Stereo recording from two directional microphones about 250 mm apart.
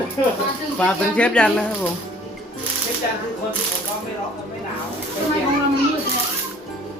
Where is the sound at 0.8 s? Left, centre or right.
Centre.